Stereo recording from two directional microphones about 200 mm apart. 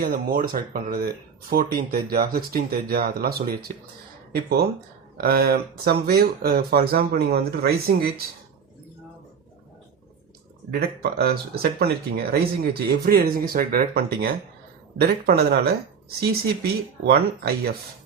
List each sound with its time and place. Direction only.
0.0 s speech: 45° right (ahead or behind)
10.7 s speech: 50° right (ahead or behind)
17.1 s speech: 50° right (ahead or behind)